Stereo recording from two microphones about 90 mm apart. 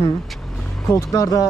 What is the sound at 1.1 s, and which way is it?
Speech, 40° left (ahead or behind).